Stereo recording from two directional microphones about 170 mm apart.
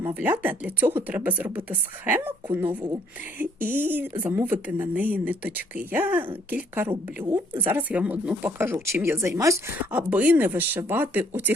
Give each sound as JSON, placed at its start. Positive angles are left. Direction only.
{"t": 0.0, "sound": "speech", "side_deg": -10}
{"t": 2.6, "sound": "speech", "side_deg": -25}
{"t": 3.3, "sound": "speech", "side_deg": -10}